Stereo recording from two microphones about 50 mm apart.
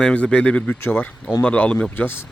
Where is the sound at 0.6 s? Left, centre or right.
Left.